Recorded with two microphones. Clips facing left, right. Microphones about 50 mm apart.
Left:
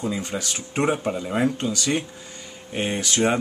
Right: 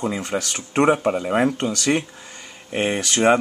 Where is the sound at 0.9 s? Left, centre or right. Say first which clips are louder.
Right 5 dB; right.